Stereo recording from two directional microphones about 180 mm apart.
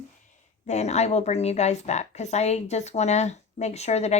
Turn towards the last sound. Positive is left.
turn(degrees=35)  # may be behind; listen again after turning